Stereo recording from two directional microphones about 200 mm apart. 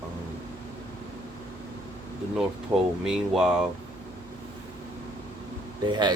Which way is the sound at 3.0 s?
5° right (ahead or behind).